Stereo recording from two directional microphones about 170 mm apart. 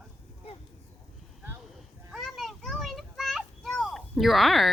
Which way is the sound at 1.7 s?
Centre (ahead or behind).